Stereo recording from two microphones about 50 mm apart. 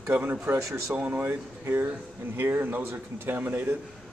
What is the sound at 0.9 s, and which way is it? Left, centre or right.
Speech, right.